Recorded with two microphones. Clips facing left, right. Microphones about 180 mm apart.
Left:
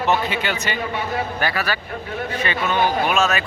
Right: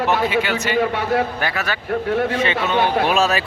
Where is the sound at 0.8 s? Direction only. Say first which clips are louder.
Right 6 dB; 70° right (ahead or behind).